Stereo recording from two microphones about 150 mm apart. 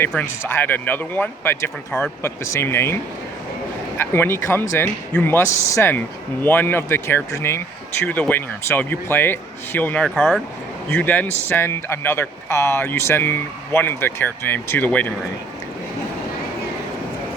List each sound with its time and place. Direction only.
0.2 s speech: 15° left (ahead or behind)